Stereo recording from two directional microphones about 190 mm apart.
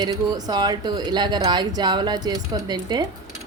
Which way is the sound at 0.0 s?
20° right (ahead or behind).